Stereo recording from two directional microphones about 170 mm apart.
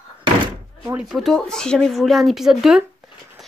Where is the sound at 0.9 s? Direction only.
Centre (ahead or behind).